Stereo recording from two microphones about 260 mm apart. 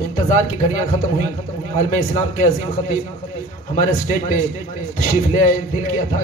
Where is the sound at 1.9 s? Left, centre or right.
Left.